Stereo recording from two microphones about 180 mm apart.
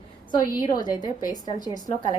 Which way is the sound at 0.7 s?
25° left (ahead or behind).